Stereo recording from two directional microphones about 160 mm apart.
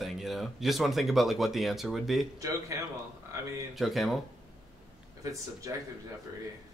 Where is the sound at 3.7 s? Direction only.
Centre (ahead or behind).